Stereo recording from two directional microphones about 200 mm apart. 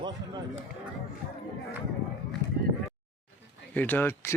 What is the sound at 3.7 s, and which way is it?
Speech, 10° left (ahead or behind).